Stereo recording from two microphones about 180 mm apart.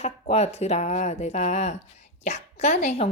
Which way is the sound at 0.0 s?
35° left (ahead or behind).